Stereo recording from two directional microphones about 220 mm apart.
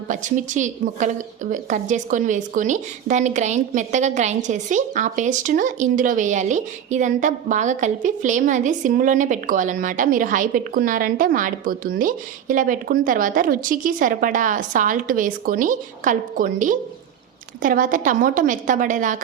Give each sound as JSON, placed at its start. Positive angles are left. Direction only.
{"t": 0.1, "sound": "a woman's voice", "side_deg": -35}